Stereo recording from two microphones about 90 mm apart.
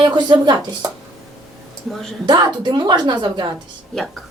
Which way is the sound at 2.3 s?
55° right (ahead or behind).